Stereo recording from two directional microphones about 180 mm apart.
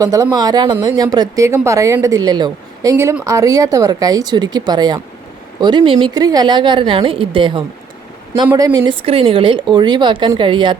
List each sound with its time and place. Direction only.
0.0 s speech: 20° right (ahead or behind)